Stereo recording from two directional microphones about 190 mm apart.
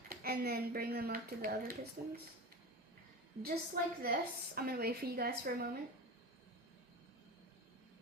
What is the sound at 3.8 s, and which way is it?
Speech, 50° right (ahead or behind).